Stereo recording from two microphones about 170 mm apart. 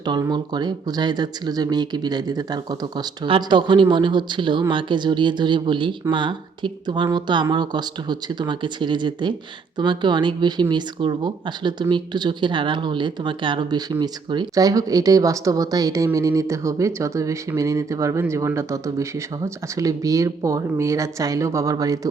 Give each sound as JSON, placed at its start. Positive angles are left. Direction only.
{"t": 0.0, "sound": "speech", "side_deg": -25}